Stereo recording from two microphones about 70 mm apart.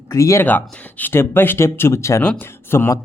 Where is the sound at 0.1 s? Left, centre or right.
Left.